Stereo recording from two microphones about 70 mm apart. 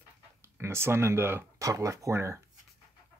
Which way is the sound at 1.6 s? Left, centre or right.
Right.